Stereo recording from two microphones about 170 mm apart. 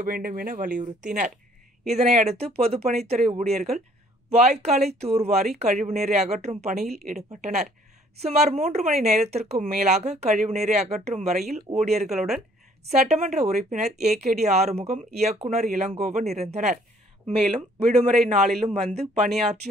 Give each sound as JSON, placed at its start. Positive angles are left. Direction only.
{"t": 0.0, "sound": "speech", "side_deg": -55}
{"t": 12.1, "sound": "a woman's voice", "side_deg": 0}
{"t": 13.2, "sound": "speech", "side_deg": -40}